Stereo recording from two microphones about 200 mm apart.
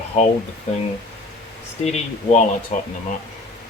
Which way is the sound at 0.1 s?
35° left (ahead or behind).